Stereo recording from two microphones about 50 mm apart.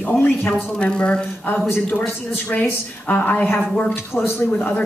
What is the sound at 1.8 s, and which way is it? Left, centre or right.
Speech, left.